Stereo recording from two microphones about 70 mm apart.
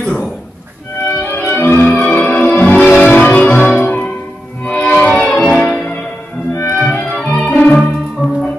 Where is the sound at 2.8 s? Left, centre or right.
Centre.